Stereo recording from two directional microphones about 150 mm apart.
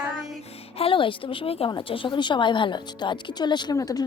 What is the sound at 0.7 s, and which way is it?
A woman's voice, 35° left (ahead or behind).